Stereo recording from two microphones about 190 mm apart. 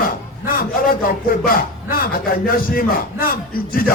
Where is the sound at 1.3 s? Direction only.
50° left (ahead or behind).